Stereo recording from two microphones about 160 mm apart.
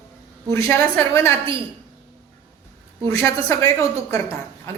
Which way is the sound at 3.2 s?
20° left (ahead or behind).